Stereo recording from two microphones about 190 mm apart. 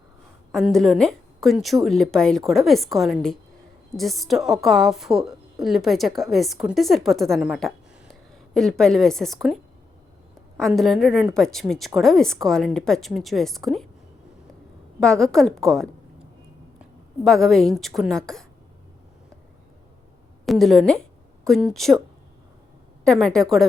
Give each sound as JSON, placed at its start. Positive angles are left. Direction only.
{"t": 0.5, "sound": "a woman's voice", "side_deg": 0}
{"t": 10.6, "sound": "a woman's voice", "side_deg": 0}
{"t": 15.0, "sound": "a woman's voice", "side_deg": 5}
{"t": 17.2, "sound": "a woman's voice", "side_deg": 0}
{"t": 20.4, "sound": "a woman's voice", "side_deg": 0}
{"t": 23.0, "sound": "a woman's voice", "side_deg": 0}